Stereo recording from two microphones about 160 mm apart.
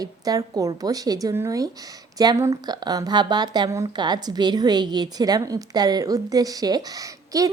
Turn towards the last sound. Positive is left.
turn(degrees=-20)  # may be behind; listen again after turning